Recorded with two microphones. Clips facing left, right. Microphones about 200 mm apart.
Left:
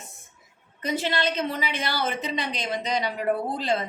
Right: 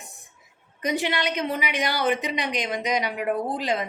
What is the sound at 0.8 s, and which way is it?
A woman's voice, 15° right (ahead or behind).